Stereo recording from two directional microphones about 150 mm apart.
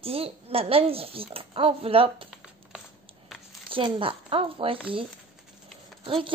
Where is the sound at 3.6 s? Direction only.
35° right (ahead or behind).